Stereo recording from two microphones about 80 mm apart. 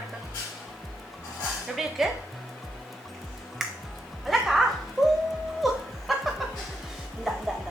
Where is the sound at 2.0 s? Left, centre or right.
Centre.